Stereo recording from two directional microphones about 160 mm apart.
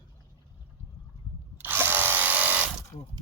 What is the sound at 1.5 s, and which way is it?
Drill, 10° right (ahead or behind).